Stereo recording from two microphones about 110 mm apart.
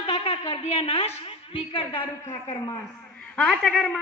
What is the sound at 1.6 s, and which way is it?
Speech, 55° left (ahead or behind).